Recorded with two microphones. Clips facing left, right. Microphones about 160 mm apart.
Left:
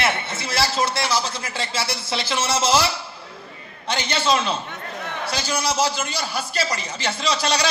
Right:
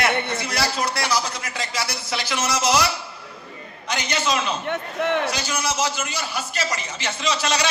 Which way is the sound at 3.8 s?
30° left (ahead or behind).